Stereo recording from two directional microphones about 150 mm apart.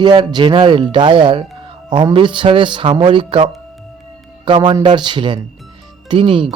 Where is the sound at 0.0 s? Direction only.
30° right (ahead or behind).